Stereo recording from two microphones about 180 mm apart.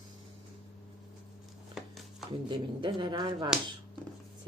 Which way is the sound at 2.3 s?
25° right (ahead or behind).